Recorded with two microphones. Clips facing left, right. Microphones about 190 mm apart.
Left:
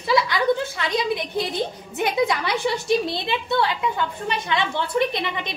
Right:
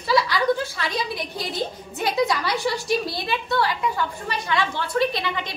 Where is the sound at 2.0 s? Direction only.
20° left (ahead or behind).